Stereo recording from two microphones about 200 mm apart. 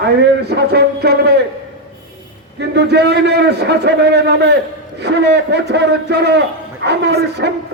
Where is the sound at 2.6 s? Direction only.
60° right (ahead or behind).